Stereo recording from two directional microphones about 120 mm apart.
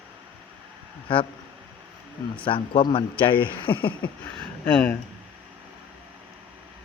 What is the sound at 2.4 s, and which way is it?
Speech, 45° left (ahead or behind).